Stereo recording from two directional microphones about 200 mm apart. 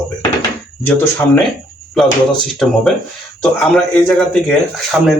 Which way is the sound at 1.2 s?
15° left (ahead or behind).